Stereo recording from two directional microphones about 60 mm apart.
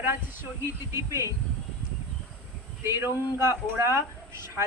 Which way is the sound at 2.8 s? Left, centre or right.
Right.